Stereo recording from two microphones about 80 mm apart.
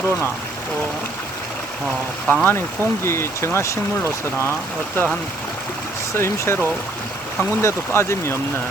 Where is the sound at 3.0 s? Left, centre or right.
Left.